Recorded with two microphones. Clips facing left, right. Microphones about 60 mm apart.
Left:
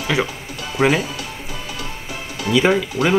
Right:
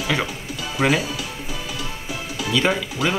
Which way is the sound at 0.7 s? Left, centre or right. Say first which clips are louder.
Left 3 dB; centre.